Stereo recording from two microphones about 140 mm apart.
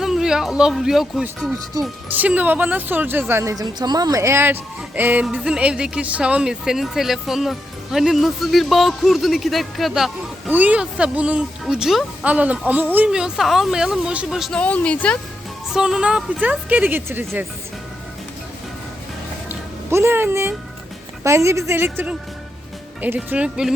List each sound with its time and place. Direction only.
0.0 s speech: 5° right (ahead or behind)
14.6 s speech: 10° left (ahead or behind)
15.7 s speech: 5° right (ahead or behind)
19.5 s a sound: 15° right (ahead or behind)
21.2 s a woman's voice: 20° right (ahead or behind)